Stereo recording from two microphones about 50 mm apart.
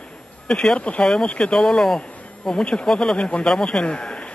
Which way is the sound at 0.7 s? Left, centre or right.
Left.